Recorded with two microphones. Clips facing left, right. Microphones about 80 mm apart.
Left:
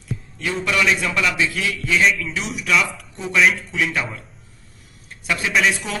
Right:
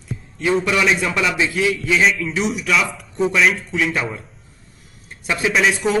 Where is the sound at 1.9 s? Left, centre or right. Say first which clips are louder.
Left 2 dB; centre.